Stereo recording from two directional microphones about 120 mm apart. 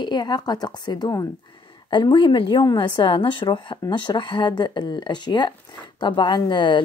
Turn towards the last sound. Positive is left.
turn(degrees=40)  # may be behind; listen again after turning